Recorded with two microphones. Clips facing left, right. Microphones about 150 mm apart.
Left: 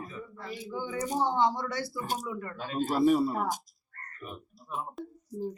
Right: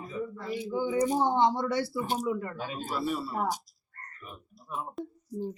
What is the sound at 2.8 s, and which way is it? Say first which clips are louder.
Speech: left 9 dB; 45° left (ahead or behind).